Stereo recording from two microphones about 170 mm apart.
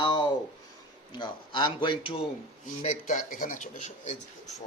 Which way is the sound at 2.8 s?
45° left (ahead or behind).